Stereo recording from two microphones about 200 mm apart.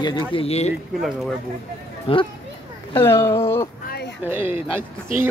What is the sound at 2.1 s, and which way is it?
Speech, 30° left (ahead or behind).